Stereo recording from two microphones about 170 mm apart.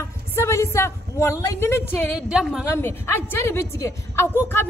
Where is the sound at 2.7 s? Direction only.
15° left (ahead or behind).